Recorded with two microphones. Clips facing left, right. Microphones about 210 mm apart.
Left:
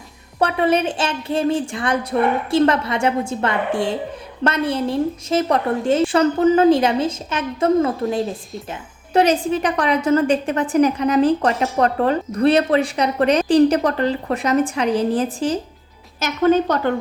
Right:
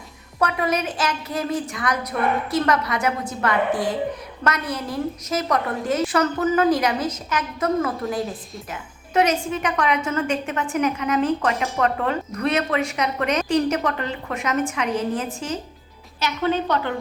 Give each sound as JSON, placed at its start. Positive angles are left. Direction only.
{"t": 0.3, "sound": "a woman's voice", "side_deg": 30}
{"t": 16.2, "sound": "a woman's voice", "side_deg": 45}